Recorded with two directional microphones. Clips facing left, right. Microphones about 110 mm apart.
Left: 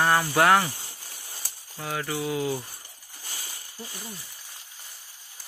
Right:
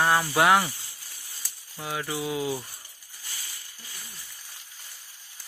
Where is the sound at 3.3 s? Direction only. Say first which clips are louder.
Left 2 dB; 30° left (ahead or behind).